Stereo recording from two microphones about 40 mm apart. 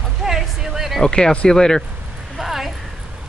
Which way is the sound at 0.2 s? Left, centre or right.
Centre.